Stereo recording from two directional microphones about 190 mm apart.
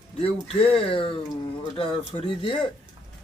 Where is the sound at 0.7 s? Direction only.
30° left (ahead or behind).